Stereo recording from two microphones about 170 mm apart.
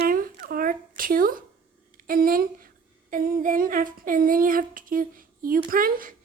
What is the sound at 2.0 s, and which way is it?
A woman's voice, 55° right (ahead or behind).